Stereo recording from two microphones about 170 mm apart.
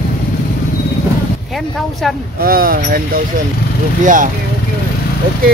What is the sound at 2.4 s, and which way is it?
Speech, 60° right (ahead or behind).